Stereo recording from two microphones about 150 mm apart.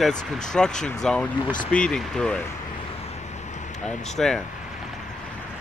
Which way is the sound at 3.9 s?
5° left (ahead or behind).